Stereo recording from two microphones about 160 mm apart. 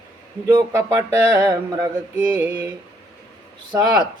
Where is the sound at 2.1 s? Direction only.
10° right (ahead or behind).